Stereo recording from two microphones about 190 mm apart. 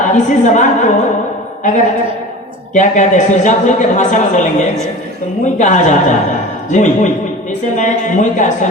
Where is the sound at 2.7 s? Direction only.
40° left (ahead or behind).